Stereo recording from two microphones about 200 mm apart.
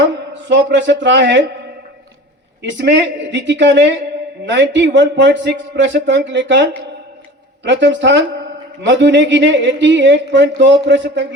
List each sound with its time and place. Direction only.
0.0 s speech: 65° right (ahead or behind)
2.6 s speech: 60° right (ahead or behind)